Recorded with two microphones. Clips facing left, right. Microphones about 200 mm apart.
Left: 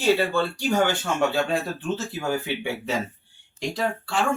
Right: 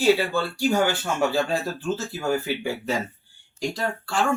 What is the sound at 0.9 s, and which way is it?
Speech, centre (ahead or behind).